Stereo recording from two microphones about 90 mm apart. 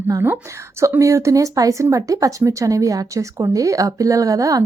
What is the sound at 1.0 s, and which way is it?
Speech, 35° right (ahead or behind).